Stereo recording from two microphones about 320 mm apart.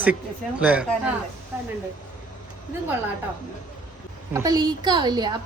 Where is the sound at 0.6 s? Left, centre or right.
Centre.